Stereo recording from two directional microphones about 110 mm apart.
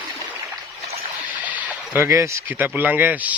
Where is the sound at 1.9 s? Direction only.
25° right (ahead or behind).